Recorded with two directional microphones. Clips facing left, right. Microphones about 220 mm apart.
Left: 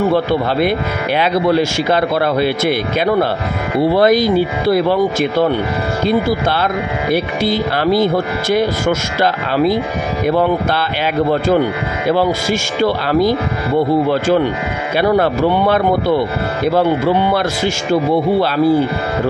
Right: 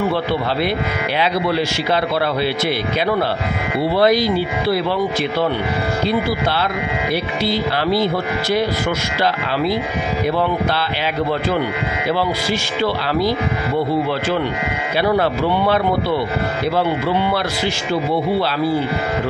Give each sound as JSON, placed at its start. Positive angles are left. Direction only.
{"t": 0.1, "sound": "speech", "side_deg": 50}
{"t": 7.1, "sound": "speech", "side_deg": 50}
{"t": 12.1, "sound": "speech", "side_deg": 45}
{"t": 15.0, "sound": "speech", "side_deg": 50}